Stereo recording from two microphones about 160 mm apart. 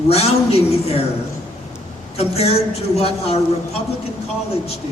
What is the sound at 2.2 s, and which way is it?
A man's voice, 40° left (ahead or behind).